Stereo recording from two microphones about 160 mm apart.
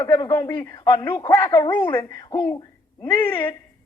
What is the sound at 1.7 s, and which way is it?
A woman's voice, 15° left (ahead or behind).